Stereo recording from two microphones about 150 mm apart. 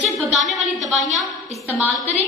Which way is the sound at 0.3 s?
Centre (ahead or behind).